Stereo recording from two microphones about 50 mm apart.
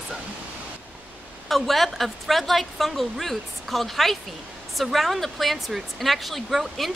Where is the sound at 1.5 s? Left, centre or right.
Centre.